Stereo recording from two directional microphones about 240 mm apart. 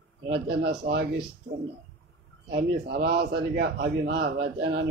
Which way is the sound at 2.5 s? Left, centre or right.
Right.